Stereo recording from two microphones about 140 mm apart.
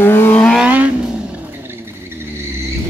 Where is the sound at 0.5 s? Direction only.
10° right (ahead or behind).